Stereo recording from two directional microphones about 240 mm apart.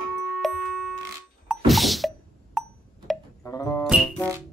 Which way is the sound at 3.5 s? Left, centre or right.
Centre.